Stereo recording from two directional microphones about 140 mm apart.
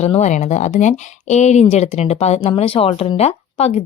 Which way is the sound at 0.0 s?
50° left (ahead or behind).